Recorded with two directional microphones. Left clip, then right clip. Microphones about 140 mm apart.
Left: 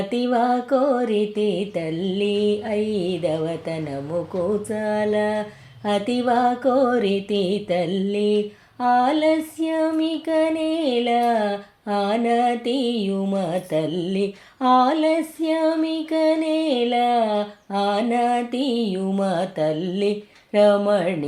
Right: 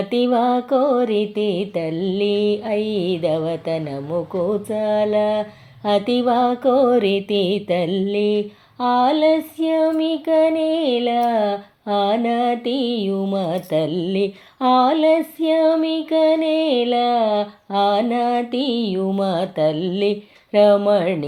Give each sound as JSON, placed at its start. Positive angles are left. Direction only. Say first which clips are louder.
{"t": 0.1, "sound": "child singing", "louder": "right 3 dB", "side_deg": -30}